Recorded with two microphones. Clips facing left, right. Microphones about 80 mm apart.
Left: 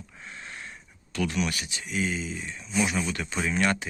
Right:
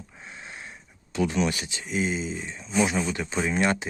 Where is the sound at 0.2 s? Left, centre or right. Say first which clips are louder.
Left 1 dB; centre.